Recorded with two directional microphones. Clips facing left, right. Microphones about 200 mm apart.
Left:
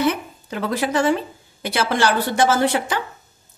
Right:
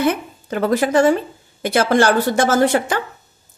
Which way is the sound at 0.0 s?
50° right (ahead or behind).